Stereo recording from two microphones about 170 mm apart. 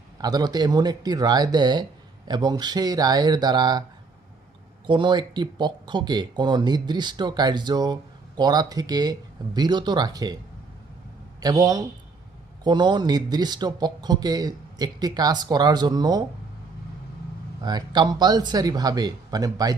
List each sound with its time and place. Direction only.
0.2 s speech: 25° right (ahead or behind)
4.9 s speech: 30° right (ahead or behind)
11.3 s speech: 25° right (ahead or behind)
17.6 s speech: 25° right (ahead or behind)